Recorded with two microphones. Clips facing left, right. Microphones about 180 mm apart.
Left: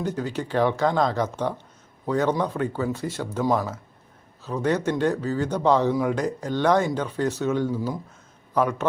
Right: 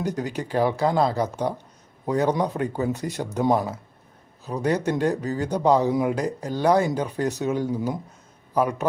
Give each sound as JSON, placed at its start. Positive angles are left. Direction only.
{"t": 0.0, "sound": "speech", "side_deg": -15}